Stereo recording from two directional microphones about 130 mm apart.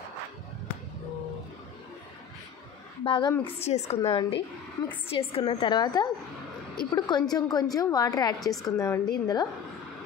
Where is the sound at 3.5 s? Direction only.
55° left (ahead or behind).